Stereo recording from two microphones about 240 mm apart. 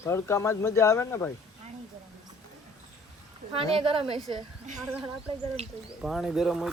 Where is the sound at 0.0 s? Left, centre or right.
Centre.